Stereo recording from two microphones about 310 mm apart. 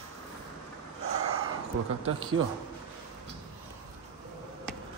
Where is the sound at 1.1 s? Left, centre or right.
Right.